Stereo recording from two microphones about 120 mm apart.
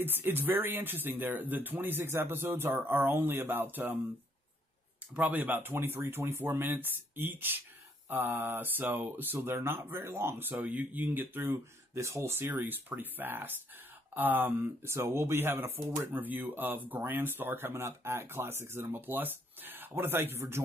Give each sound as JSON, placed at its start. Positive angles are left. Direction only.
{"t": 0.0, "sound": "speech", "side_deg": -20}
{"t": 5.1, "sound": "speech", "side_deg": -15}